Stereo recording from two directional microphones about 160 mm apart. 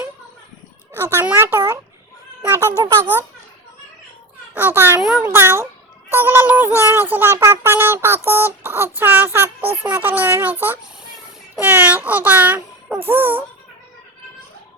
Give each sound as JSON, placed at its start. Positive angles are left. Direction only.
{"t": 0.9, "sound": "speech", "side_deg": -15}
{"t": 4.5, "sound": "a child's voice", "side_deg": -10}
{"t": 5.2, "sound": "speech", "side_deg": -15}